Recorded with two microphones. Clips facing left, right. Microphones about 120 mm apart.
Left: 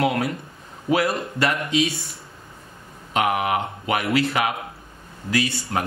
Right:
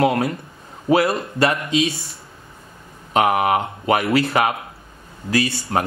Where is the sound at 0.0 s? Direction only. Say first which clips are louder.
Right 4 dB; 30° right (ahead or behind).